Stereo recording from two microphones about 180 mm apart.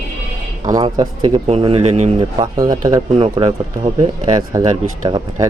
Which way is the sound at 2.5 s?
20° right (ahead or behind).